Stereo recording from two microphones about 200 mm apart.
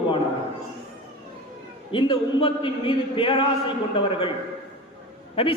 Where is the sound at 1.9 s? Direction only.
25° left (ahead or behind).